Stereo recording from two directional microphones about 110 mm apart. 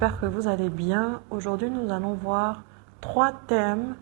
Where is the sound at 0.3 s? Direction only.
15° right (ahead or behind).